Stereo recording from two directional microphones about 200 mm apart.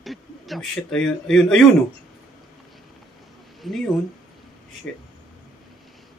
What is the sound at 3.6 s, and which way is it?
Speech, centre (ahead or behind).